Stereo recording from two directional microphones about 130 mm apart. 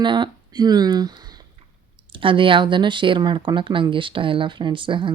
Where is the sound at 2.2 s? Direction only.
40° right (ahead or behind).